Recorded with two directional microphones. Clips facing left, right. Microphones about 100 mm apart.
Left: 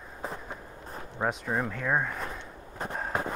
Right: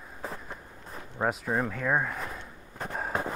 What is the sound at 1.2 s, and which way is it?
Speech, centre (ahead or behind).